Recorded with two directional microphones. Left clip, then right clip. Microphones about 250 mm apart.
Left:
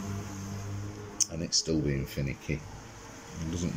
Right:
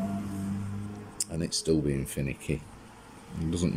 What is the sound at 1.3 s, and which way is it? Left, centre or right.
Speech, centre.